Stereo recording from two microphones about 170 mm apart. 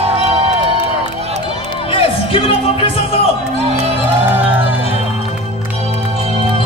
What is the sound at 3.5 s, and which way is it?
Music, 40° right (ahead or behind).